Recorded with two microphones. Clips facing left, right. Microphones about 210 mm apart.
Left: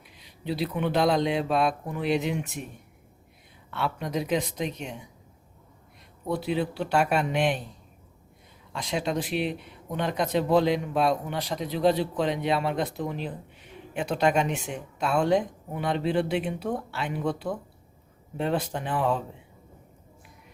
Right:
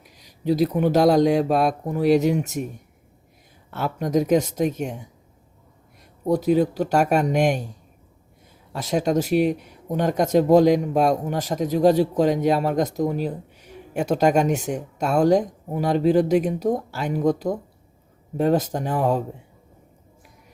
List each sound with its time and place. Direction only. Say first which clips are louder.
0.2 s speech: right 9 dB; 45° right (ahead or behind)
3.7 s speech: right 6 dB; 45° right (ahead or behind)
6.2 s speech: right 9 dB; 40° right (ahead or behind)
8.8 s speech: right 7 dB; 45° right (ahead or behind)